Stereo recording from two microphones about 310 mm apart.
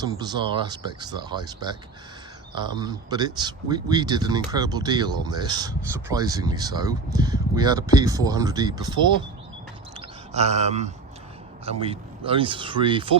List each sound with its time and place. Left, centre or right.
0.0 s speech: centre
10.3 s speech: right